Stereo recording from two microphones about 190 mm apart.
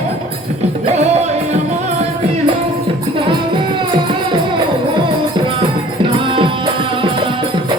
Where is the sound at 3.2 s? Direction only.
25° right (ahead or behind).